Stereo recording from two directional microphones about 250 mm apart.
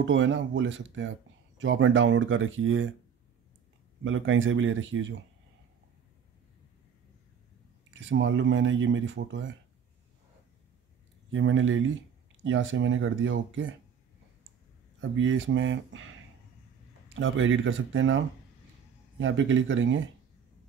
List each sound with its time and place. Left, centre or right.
0.0 s speech: right
4.0 s speech: right
7.9 s speech: right
11.3 s speech: right
15.0 s speech: right
17.1 s speech: right